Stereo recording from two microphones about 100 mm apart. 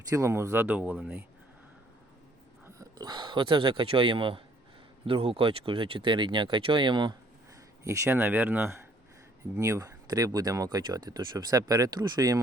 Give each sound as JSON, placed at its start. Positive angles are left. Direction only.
{"t": 0.1, "sound": "speech", "side_deg": -30}
{"t": 3.0, "sound": "speech", "side_deg": -45}
{"t": 7.9, "sound": "speech", "side_deg": -30}